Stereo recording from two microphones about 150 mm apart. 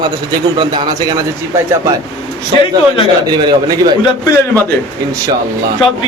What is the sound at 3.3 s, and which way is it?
Speech, 30° right (ahead or behind).